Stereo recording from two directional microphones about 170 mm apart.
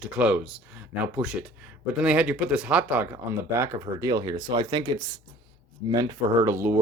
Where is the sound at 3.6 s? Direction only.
20° right (ahead or behind).